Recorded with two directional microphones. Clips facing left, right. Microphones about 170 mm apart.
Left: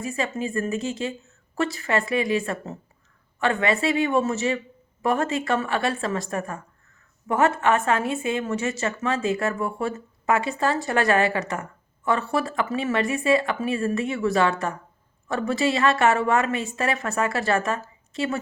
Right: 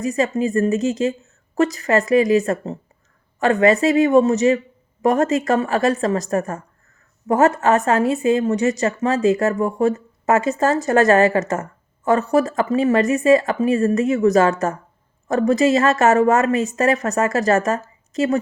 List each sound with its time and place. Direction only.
0.0 s a woman's voice: 40° right (ahead or behind)